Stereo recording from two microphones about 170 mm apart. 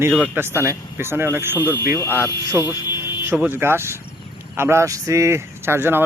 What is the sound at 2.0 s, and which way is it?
Speech, 15° left (ahead or behind).